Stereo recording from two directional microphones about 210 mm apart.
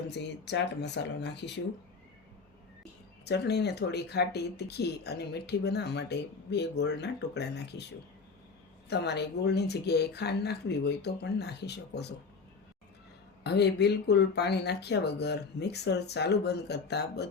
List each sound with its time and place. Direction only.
0.1 s speech: 55° left (ahead or behind)
3.2 s speech: 50° left (ahead or behind)
8.9 s speech: 55° left (ahead or behind)
13.4 s speech: 55° left (ahead or behind)